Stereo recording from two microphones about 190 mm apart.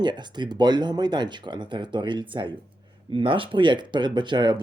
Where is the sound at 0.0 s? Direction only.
25° right (ahead or behind).